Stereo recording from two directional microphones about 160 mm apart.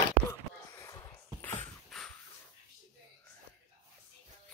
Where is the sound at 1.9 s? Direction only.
Centre (ahead or behind).